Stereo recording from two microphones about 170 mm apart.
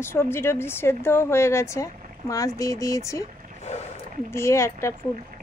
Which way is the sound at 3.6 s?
40° left (ahead or behind).